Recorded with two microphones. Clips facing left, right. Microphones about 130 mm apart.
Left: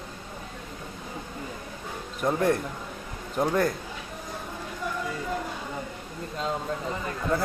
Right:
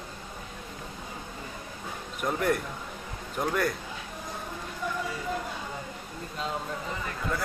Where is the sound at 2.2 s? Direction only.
30° left (ahead or behind).